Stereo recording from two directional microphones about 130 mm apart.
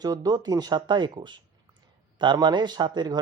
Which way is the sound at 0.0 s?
30° right (ahead or behind).